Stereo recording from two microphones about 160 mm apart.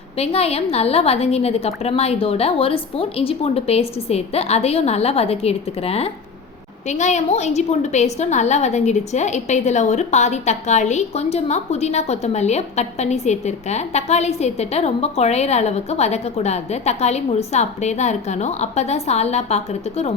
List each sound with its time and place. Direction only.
0.2 s a woman's voice: 40° left (ahead or behind)